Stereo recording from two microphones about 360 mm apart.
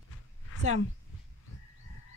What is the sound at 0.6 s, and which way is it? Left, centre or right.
Speech, centre.